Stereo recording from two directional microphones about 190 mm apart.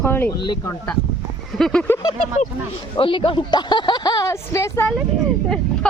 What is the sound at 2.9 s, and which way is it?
Speech, 25° left (ahead or behind).